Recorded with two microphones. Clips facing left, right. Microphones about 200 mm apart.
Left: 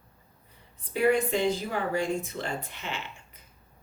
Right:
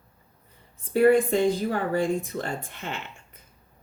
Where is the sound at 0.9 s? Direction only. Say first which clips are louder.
Right 5 dB; 50° right (ahead or behind).